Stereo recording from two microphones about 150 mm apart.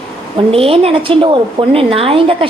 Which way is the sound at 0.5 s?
40° right (ahead or behind).